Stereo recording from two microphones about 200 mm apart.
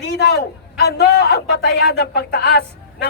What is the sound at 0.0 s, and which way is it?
A man's voice, 55° left (ahead or behind).